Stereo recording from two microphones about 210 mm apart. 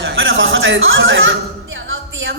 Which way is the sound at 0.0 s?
65° right (ahead or behind).